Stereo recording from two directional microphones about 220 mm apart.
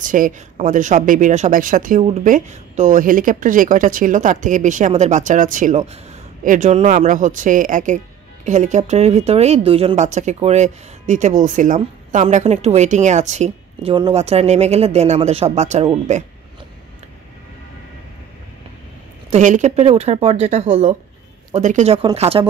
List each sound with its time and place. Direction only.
0.0 s speech: 35° right (ahead or behind)
19.3 s speech: 35° right (ahead or behind)